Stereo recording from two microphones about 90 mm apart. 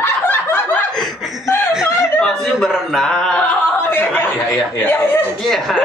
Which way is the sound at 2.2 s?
5° left (ahead or behind).